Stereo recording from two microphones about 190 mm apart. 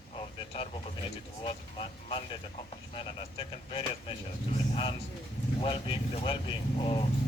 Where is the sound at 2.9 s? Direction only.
25° left (ahead or behind).